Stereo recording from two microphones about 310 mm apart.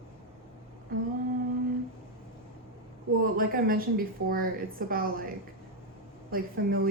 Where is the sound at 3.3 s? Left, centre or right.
Right.